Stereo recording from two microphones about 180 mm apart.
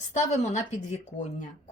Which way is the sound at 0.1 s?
40° left (ahead or behind).